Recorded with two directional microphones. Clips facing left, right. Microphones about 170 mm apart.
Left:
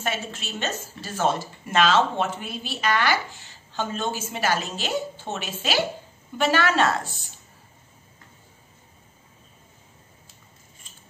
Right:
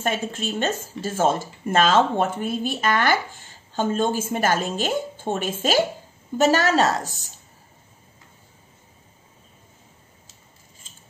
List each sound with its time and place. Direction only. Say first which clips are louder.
0.0 s a woman's voice: right 5 dB; 50° right (ahead or behind)